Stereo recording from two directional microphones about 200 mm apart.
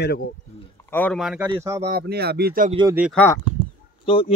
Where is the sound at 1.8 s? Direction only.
50° right (ahead or behind).